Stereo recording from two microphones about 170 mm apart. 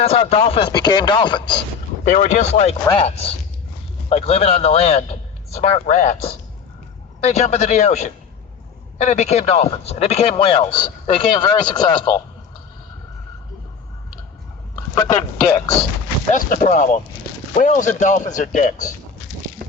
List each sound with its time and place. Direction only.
0.0 s a man's voice: 35° left (ahead or behind)
0.7 s speech: 25° left (ahead or behind)
2.0 s a man's voice: 45° left (ahead or behind); by 12.2 s 25° left (ahead or behind)
14.8 s a man's voice: 20° left (ahead or behind)
16.3 s speech: 50° left (ahead or behind)